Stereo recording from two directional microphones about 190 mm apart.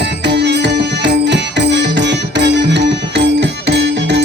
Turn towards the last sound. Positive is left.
turn(degrees=-65)  # may be behind; listen again after turning